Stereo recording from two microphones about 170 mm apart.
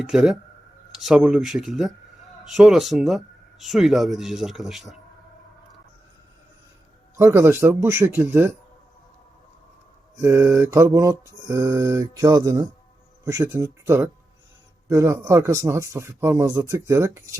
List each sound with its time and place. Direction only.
0.0 s speech: 5° right (ahead or behind)
7.2 s mantra: 15° right (ahead or behind)
10.2 s mantra: 15° right (ahead or behind)